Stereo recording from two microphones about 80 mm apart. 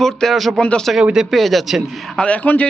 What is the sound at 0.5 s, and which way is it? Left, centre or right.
Speech, centre.